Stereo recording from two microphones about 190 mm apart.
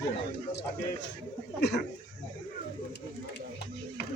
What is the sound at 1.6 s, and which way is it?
Speech, 60° left (ahead or behind).